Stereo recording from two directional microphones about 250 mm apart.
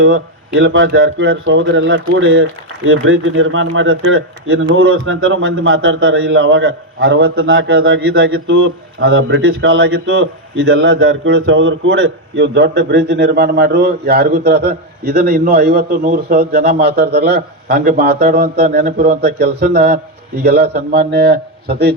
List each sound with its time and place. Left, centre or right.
0.0 s a man's voice: right